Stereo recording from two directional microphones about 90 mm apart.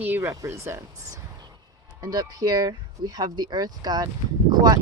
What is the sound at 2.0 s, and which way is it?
Speech, 45° right (ahead or behind).